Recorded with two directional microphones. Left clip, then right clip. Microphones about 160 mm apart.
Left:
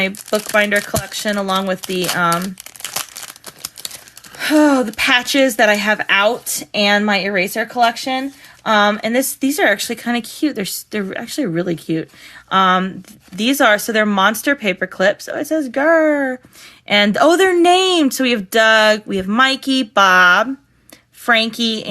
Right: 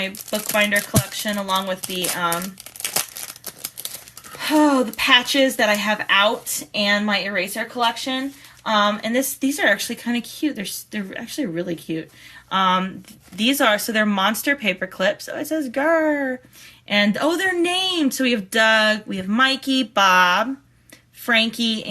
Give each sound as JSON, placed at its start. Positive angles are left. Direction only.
{"t": 0.3, "sound": "speech", "side_deg": 50}
{"t": 2.8, "sound": "crumpling", "side_deg": 30}
{"t": 4.4, "sound": "speech", "side_deg": 55}